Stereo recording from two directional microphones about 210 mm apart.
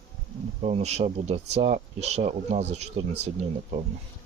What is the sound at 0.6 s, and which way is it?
Speech, 30° right (ahead or behind).